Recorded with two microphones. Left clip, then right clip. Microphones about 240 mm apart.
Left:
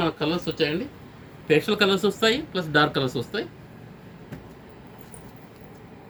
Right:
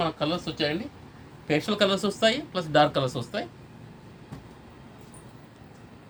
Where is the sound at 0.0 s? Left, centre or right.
Right.